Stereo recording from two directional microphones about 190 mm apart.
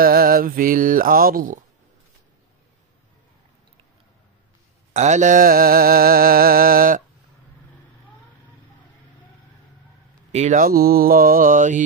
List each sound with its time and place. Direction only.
0.0 s mantra: 50° right (ahead or behind)
4.9 s mantra: 40° right (ahead or behind)
10.3 s mantra: 40° right (ahead or behind)